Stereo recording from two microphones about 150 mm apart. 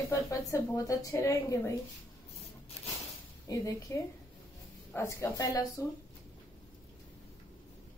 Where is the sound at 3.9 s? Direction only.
20° left (ahead or behind).